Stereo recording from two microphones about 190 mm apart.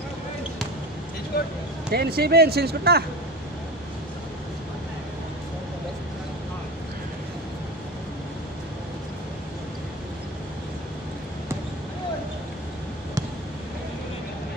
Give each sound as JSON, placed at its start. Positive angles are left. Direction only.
{"t": 1.3, "sound": "speech", "side_deg": 55}
{"t": 1.9, "sound": "speech", "side_deg": -55}